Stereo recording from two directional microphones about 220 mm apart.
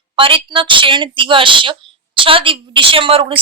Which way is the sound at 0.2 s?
25° right (ahead or behind).